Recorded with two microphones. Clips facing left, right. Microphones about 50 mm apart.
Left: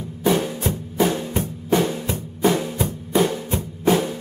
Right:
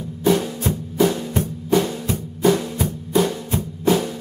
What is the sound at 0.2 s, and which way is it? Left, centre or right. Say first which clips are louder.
Drum: right 1 dB; centre.